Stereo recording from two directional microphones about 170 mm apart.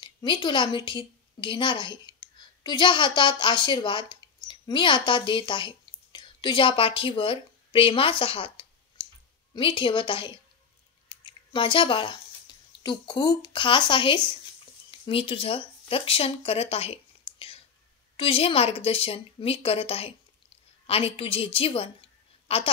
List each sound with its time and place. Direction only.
0.0 s a woman's voice: 25° left (ahead or behind)